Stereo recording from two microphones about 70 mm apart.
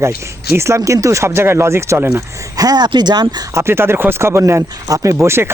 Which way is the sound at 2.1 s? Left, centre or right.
Right.